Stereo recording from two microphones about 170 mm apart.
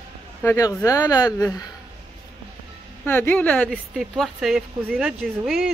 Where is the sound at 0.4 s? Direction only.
15° left (ahead or behind).